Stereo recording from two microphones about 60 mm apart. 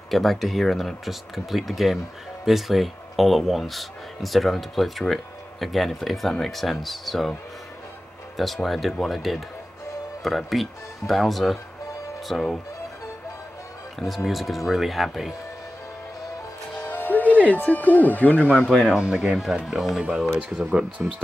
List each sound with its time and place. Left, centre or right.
0.1 s speech: centre
8.4 s speech: centre
13.9 s speech: centre
16.8 s speech: left
18.7 s speech: centre